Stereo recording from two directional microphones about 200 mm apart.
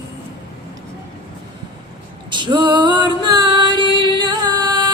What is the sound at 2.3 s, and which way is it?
Music, 25° right (ahead or behind).